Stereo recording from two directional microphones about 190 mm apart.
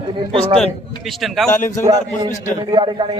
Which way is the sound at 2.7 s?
25° right (ahead or behind).